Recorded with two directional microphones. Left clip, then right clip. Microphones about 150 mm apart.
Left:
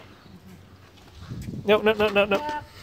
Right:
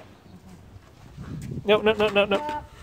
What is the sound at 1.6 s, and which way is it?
Speech, centre (ahead or behind).